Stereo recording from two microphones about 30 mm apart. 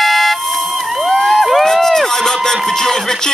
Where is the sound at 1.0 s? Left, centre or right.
Centre.